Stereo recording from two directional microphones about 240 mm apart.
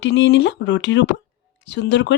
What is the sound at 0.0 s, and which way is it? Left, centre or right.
Speech, left.